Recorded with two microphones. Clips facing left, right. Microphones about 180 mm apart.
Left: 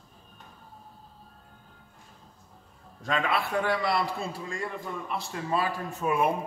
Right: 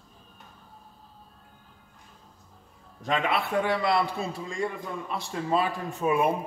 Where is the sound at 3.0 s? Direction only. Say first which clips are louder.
Right 1 dB; 20° right (ahead or behind).